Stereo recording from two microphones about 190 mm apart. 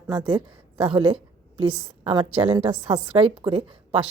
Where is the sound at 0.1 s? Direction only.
25° right (ahead or behind).